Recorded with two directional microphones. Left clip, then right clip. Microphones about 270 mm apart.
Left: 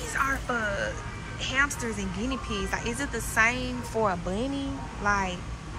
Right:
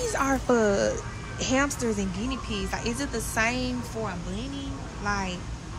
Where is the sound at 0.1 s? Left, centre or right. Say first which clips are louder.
Right 1 dB; right.